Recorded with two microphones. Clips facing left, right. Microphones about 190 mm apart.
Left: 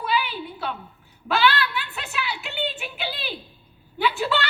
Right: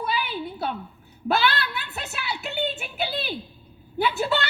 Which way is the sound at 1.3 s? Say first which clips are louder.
Left 2 dB; 40° right (ahead or behind).